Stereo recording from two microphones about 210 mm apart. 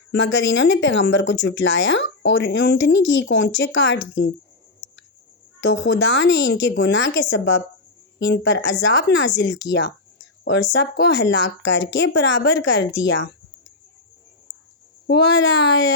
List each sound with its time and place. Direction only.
0.1 s speech: 60° left (ahead or behind)
4.8 s a sound: 60° left (ahead or behind)
5.5 s speech: 60° left (ahead or behind)
15.0 s speech: 55° left (ahead or behind)